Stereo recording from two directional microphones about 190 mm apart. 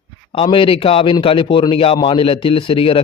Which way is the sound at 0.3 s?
25° left (ahead or behind).